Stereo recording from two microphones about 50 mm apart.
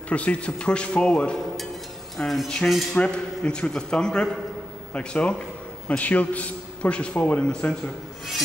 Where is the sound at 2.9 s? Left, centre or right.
Left.